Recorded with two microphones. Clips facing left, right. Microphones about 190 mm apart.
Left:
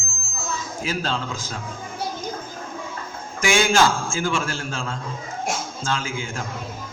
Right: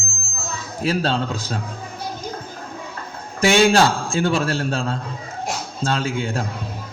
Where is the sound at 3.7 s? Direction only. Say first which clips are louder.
Right 3 dB; 35° right (ahead or behind).